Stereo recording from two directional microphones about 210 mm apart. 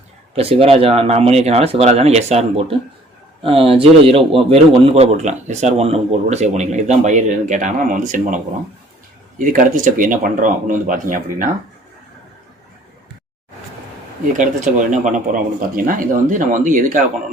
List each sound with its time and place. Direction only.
0.3 s a man's voice: 25° right (ahead or behind)
9.4 s a man's voice: 40° right (ahead or behind)
14.3 s a man's voice: 40° right (ahead or behind)